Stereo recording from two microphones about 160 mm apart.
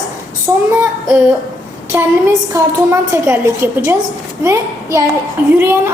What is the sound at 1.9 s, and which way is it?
A woman's voice, 15° right (ahead or behind).